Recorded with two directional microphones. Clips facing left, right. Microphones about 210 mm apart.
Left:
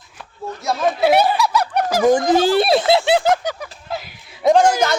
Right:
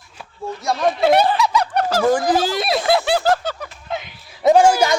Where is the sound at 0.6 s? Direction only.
Centre (ahead or behind).